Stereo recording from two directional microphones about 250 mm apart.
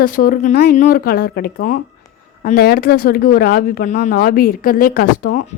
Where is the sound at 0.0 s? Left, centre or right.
Left.